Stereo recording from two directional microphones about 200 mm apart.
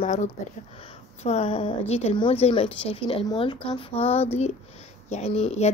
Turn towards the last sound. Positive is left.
turn(degrees=30)  # may be behind; listen again after turning